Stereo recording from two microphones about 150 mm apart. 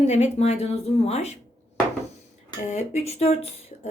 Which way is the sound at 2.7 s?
50° left (ahead or behind).